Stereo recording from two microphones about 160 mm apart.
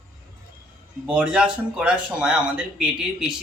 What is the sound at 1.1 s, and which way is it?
A man's voice, 5° right (ahead or behind).